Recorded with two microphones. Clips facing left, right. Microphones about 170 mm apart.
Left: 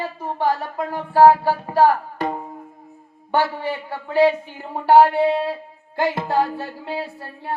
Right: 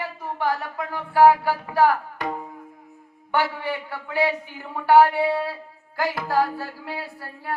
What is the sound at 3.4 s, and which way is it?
Speech, 25° left (ahead or behind).